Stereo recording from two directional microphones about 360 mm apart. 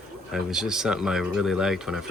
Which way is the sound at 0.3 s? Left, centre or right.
Centre.